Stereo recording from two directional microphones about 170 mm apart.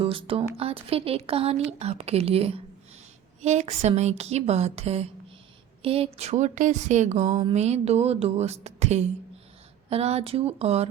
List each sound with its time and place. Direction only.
0.0 s a woman's voice: 30° right (ahead or behind)